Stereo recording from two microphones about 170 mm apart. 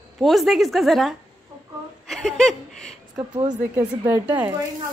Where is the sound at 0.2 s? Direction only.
Centre (ahead or behind).